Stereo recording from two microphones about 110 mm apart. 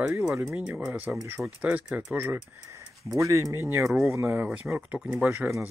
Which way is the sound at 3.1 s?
30° right (ahead or behind).